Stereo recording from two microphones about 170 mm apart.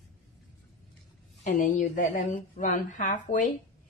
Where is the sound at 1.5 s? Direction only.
50° left (ahead or behind).